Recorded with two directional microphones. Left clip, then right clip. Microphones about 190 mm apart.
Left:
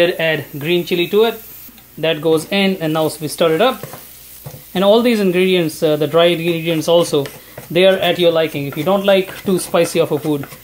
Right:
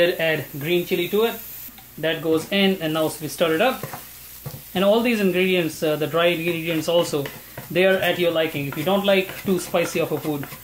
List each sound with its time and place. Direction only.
0.0 s a man's voice: 25° left (ahead or behind)
4.7 s a man's voice: 35° left (ahead or behind)